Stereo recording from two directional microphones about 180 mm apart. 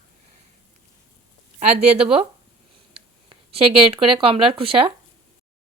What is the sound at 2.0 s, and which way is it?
Speech, 30° right (ahead or behind).